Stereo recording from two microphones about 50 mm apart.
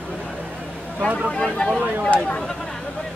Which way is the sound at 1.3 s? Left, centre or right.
Centre.